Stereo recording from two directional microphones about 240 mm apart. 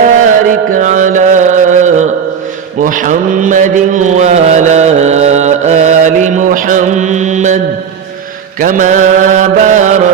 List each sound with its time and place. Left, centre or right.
0.3 s music: right
2.8 s speech: right
8.5 s mantra: right